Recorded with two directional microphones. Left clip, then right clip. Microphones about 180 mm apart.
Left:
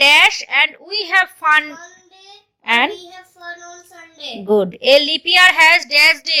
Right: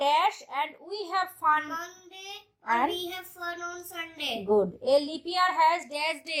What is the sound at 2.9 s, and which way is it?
A child's voice, 40° right (ahead or behind).